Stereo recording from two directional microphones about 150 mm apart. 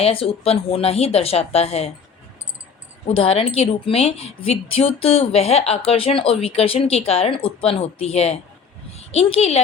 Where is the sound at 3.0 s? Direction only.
40° left (ahead or behind).